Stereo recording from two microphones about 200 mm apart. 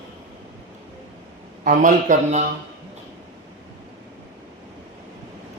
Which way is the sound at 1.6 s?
40° right (ahead or behind).